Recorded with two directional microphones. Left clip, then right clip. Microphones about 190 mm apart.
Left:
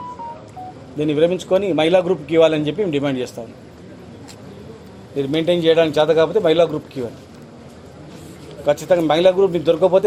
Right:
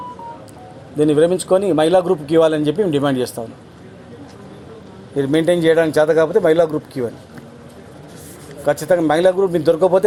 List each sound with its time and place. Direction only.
0.9 s a man's voice: 45° right (ahead or behind)
5.5 s a man's voice: 50° right (ahead or behind)
8.6 s a man's voice: 45° right (ahead or behind)